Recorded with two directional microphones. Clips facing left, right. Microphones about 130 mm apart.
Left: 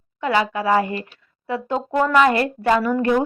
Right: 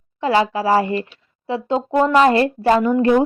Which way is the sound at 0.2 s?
30° right (ahead or behind).